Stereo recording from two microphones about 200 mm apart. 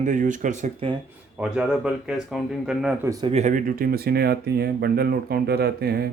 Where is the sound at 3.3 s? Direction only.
35° right (ahead or behind).